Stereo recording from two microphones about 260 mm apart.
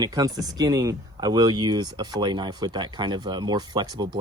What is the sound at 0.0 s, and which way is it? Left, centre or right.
Speech, centre.